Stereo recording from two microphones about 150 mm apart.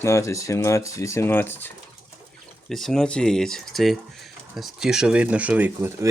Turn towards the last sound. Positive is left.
turn(degrees=-15)  # may be behind; listen again after turning